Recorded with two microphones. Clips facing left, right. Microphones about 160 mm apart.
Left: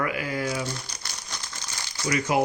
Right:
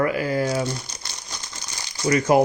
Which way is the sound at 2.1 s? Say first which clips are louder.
Right 7 dB; 45° right (ahead or behind).